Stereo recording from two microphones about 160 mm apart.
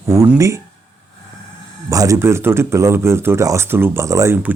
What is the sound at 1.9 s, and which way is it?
Speech, 20° right (ahead or behind).